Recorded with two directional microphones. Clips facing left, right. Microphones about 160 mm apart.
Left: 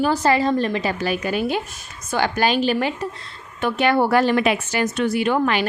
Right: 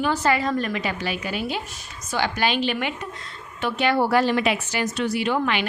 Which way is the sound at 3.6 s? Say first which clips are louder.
Left 3 dB; 50° left (ahead or behind).